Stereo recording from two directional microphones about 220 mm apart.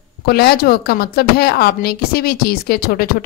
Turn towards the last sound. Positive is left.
turn(degrees=45)  # may be behind; listen again after turning